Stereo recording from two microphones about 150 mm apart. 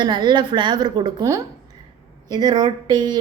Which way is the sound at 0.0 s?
30° right (ahead or behind).